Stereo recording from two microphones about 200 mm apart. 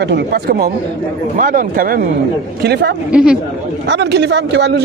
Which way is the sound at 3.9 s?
60° right (ahead or behind).